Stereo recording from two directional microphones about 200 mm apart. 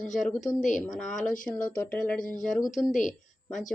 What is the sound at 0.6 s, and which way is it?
Speech, 40° left (ahead or behind).